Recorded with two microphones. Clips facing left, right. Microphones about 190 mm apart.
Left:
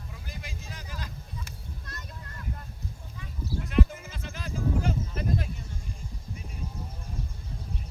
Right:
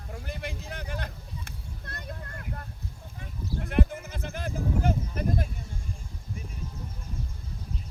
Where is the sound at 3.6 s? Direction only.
55° right (ahead or behind).